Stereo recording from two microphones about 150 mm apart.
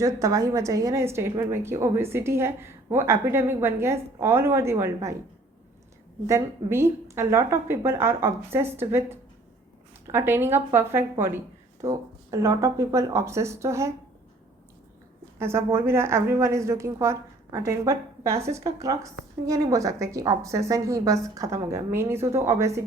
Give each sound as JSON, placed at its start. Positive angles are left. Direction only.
{"t": 0.0, "sound": "a woman's voice", "side_deg": -20}
{"t": 6.2, "sound": "a woman's voice", "side_deg": -20}
{"t": 15.4, "sound": "a woman's voice", "side_deg": -15}